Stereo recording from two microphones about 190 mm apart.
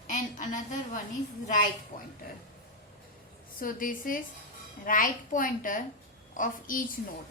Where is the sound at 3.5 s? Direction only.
45° left (ahead or behind).